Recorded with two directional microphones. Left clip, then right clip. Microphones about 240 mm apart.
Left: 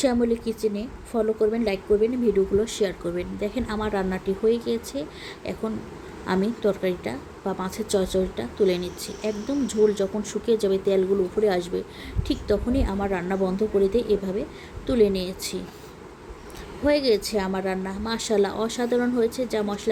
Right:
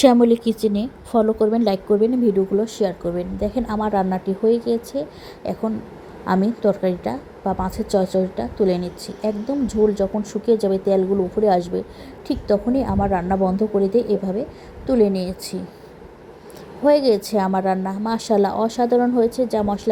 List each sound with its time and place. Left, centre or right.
0.0 s a woman's voice: right
2.6 s a woman's voice: centre
16.8 s a woman's voice: centre